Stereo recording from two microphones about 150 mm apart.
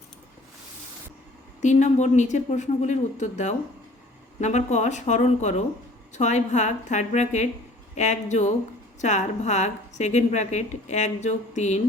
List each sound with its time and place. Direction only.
1.6 s a woman's voice: 50° left (ahead or behind)